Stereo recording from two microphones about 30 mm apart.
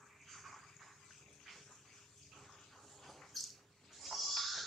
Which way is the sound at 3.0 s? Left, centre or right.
Centre.